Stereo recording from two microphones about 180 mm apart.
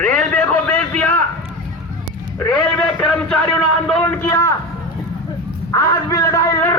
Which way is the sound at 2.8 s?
5° left (ahead or behind).